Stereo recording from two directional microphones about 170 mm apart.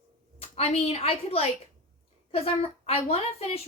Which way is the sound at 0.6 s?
35° left (ahead or behind).